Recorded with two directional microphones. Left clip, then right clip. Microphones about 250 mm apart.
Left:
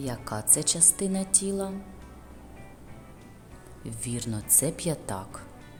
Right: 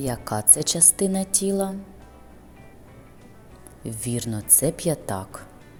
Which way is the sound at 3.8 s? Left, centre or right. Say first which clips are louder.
Right 6 dB; centre.